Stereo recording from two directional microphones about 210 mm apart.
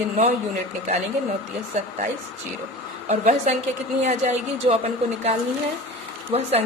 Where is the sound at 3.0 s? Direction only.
35° right (ahead or behind).